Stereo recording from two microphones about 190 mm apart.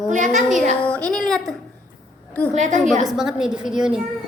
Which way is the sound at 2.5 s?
40° right (ahead or behind).